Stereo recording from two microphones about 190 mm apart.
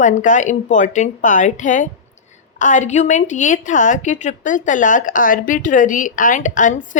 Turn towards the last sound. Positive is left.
turn(degrees=40)  # may be behind; listen again after turning